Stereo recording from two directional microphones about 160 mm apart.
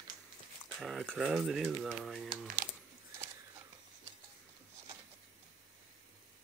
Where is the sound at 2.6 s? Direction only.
60° right (ahead or behind).